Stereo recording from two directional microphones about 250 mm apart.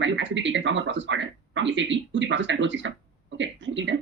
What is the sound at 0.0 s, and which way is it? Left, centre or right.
Speech, right.